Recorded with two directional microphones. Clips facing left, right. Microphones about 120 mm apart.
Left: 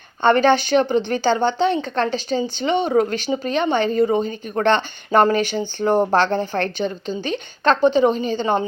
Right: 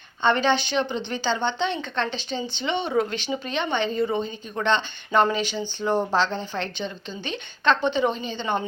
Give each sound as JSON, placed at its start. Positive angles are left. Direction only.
{"t": 0.2, "sound": "speech", "side_deg": 50}